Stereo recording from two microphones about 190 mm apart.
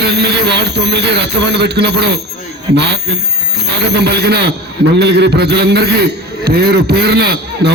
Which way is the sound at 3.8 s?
60° right (ahead or behind).